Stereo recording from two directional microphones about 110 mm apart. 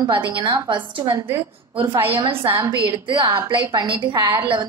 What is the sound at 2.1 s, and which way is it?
A woman's voice, 50° right (ahead or behind).